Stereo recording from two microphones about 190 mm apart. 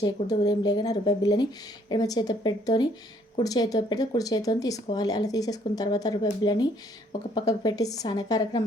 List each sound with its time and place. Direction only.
0.0 s speech: 20° left (ahead or behind)